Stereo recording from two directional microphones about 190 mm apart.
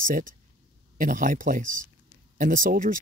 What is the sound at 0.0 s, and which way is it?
Speech, 45° right (ahead or behind).